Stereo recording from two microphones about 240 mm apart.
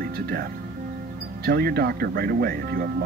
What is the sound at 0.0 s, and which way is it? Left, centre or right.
Music, right.